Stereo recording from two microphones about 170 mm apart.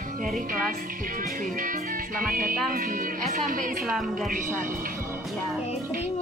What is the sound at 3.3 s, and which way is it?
Speech, 55° right (ahead or behind).